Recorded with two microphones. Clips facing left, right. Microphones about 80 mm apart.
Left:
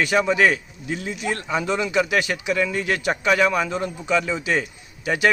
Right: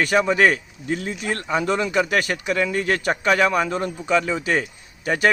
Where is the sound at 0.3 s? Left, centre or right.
Right.